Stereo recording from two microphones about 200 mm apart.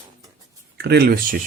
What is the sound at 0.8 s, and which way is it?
Speech, 55° right (ahead or behind).